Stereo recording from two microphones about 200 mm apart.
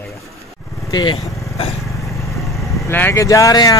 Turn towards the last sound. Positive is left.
turn(degrees=15)  # may be behind; listen again after turning